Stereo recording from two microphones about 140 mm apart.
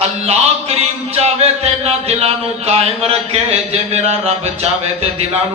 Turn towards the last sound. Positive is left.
turn(degrees=-50)  # may be behind; listen again after turning